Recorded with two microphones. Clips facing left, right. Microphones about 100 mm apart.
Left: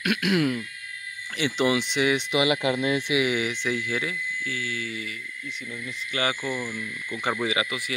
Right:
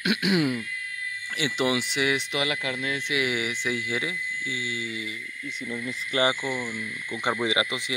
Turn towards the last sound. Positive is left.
turn(degrees=-20)  # may be behind; listen again after turning